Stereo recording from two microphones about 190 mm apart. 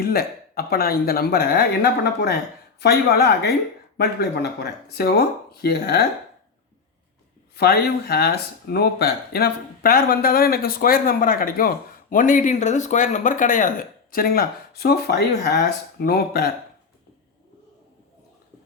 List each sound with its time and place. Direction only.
0.0 s speech: 55° left (ahead or behind)
7.5 s speech: 55° left (ahead or behind)